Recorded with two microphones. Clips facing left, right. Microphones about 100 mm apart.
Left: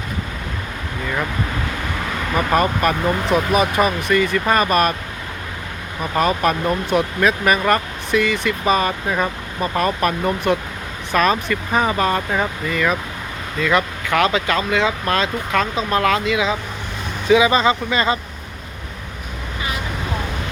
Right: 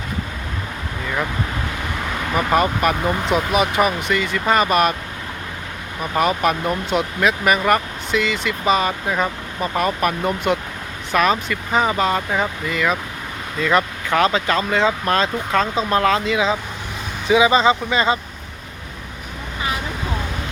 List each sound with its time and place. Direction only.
2.3 s speech: 15° right (ahead or behind)
6.0 s speech: 15° right (ahead or behind)